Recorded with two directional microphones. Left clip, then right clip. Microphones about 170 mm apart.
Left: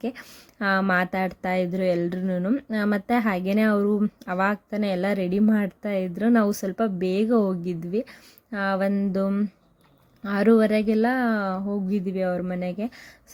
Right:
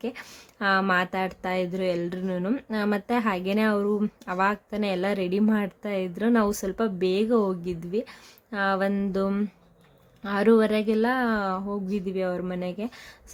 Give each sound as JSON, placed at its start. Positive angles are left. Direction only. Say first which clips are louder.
{"t": 0.0, "sound": "speech", "louder": "left 1 dB", "side_deg": 15}
{"t": 8.9, "sound": "a sound", "louder": "left 1 dB", "side_deg": 5}
{"t": 10.2, "sound": "speech", "louder": "left 1 dB", "side_deg": 15}